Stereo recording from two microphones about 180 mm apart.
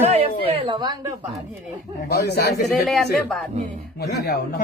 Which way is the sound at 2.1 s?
60° left (ahead or behind).